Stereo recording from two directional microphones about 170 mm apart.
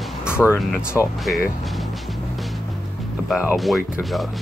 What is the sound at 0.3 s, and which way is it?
Speech, 15° left (ahead or behind).